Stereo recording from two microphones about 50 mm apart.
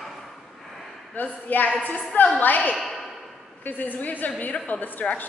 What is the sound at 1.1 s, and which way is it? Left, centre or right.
A woman's voice, left.